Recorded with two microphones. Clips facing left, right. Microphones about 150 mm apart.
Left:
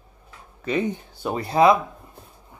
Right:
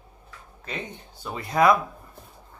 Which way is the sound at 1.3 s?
35° left (ahead or behind).